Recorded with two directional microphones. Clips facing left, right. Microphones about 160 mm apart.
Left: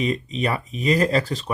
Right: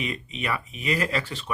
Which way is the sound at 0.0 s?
35° left (ahead or behind).